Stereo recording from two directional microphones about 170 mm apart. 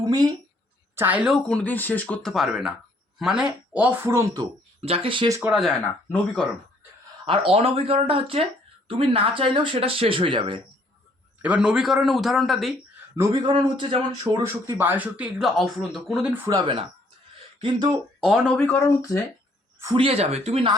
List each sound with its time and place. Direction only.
0.0 s speech: 20° right (ahead or behind)
0.9 s speech: 10° right (ahead or behind)
4.8 s speech: 35° right (ahead or behind)
5.4 s speech: 5° right (ahead or behind)
7.5 s speech: 35° right (ahead or behind)
11.4 s speech: 5° right (ahead or behind)
13.1 s a man's voice: 20° right (ahead or behind)
14.3 s speech: 15° right (ahead or behind)
16.3 s a man's voice: 20° right (ahead or behind)
18.2 s speech: 5° right (ahead or behind); by 19.2 s 20° left (ahead or behind)
19.8 s speech: 20° right (ahead or behind)
20.1 s speech: 35° right (ahead or behind)